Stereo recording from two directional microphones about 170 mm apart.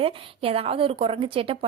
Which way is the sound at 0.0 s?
30° right (ahead or behind).